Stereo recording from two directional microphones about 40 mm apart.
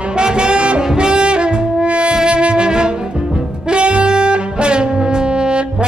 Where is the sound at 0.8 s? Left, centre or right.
Right.